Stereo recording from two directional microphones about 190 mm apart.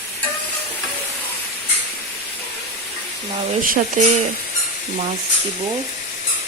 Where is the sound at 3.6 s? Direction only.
45° right (ahead or behind).